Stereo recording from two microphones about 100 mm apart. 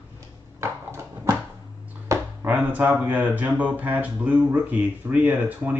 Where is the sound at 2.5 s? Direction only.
15° right (ahead or behind).